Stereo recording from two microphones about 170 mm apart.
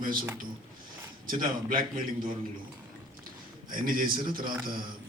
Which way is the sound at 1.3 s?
55° right (ahead or behind).